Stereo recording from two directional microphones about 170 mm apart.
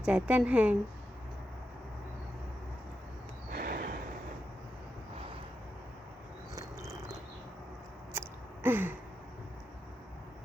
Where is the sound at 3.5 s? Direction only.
60° right (ahead or behind).